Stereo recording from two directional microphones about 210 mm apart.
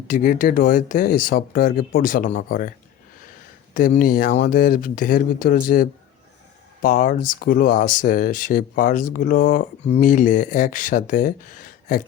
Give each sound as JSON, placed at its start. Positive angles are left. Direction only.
{"t": 0.1, "sound": "speech", "side_deg": 40}
{"t": 3.8, "sound": "speech", "side_deg": 40}